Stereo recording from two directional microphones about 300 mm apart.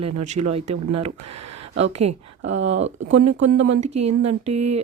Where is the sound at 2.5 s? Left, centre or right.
Right.